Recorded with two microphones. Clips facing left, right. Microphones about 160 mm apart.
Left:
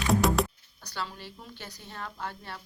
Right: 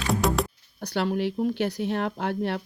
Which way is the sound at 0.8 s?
65° right (ahead or behind).